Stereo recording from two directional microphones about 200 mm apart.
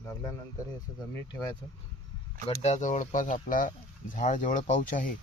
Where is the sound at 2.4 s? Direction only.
35° left (ahead or behind).